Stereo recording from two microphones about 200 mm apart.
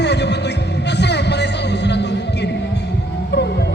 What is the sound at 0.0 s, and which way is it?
Music, 60° left (ahead or behind).